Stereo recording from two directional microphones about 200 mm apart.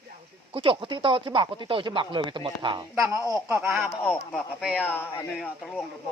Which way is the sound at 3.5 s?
10° right (ahead or behind).